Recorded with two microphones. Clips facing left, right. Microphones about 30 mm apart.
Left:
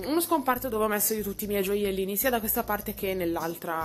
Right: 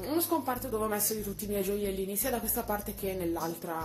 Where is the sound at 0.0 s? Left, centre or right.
Left.